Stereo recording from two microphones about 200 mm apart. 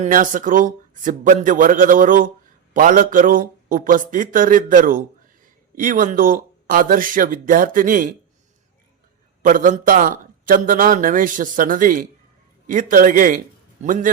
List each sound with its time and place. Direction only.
0.0 s a man's voice: 40° right (ahead or behind)
9.4 s a man's voice: 40° right (ahead or behind)